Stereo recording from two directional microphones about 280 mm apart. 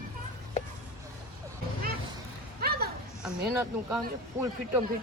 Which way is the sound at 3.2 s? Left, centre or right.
Centre.